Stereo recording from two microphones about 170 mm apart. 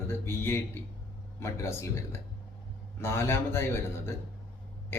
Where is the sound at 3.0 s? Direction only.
15° left (ahead or behind).